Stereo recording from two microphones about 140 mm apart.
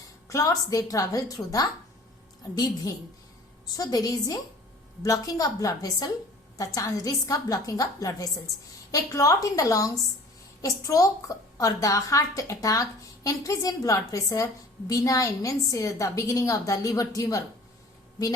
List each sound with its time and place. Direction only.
0.3 s a woman's voice: 25° left (ahead or behind)